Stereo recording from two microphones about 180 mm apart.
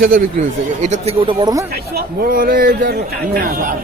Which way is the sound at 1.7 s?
60° right (ahead or behind).